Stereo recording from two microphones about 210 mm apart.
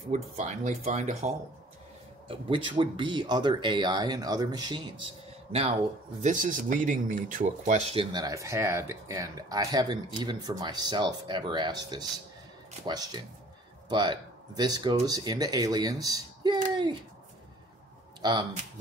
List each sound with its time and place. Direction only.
0.1 s speech: 35° right (ahead or behind)
6.2 s speech: 40° right (ahead or behind); by 16.5 s 15° right (ahead or behind)
18.2 s speech: 20° right (ahead or behind)